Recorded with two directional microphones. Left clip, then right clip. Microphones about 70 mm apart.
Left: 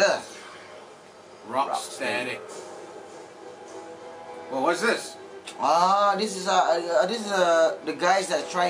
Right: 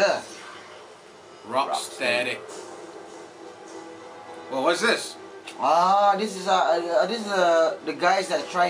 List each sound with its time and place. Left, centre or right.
1.5 s speech: centre
4.5 s speech: centre
5.6 s a man's voice: centre